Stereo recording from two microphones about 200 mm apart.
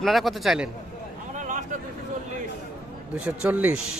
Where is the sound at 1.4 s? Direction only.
40° right (ahead or behind).